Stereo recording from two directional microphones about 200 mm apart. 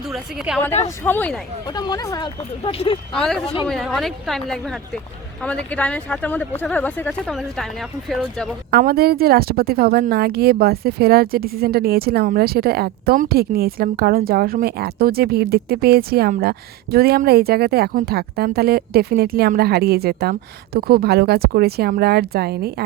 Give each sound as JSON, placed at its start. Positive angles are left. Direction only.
{"t": 0.1, "sound": "speech", "side_deg": 0}
{"t": 1.6, "sound": "speech", "side_deg": 20}
{"t": 3.7, "sound": "speech", "side_deg": 0}
{"t": 8.7, "sound": "a woman's voice", "side_deg": -50}